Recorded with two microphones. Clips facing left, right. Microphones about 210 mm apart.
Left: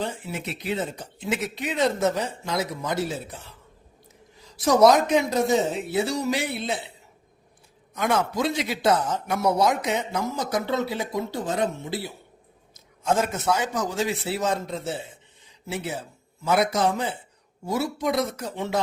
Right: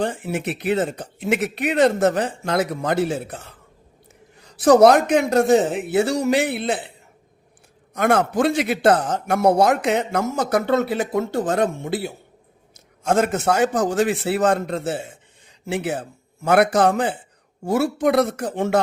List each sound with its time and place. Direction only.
0.0 s speech: 50° right (ahead or behind)
4.4 s speech: 65° right (ahead or behind)
6.2 s a man's voice: 60° right (ahead or behind)
7.9 s speech: 60° right (ahead or behind)
9.3 s a man's voice: 50° right (ahead or behind); by 11.2 s 70° right (ahead or behind)
11.3 s speech: 50° right (ahead or behind)
13.1 s speech: 70° right (ahead or behind)
13.8 s a man's voice: 50° right (ahead or behind); by 14.9 s 70° right (ahead or behind)
14.9 s a man's voice: 50° right (ahead or behind); by 17.2 s 65° right (ahead or behind)
17.6 s speech: 55° right (ahead or behind)